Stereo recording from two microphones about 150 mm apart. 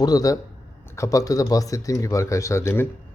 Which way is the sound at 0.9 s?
20° left (ahead or behind).